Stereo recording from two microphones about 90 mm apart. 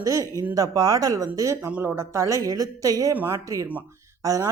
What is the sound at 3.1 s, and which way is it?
Speech, 25° right (ahead or behind).